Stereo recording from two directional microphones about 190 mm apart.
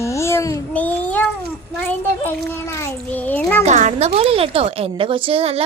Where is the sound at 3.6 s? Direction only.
35° right (ahead or behind).